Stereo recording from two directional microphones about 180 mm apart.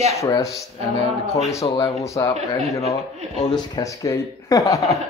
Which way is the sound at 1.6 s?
25° left (ahead or behind).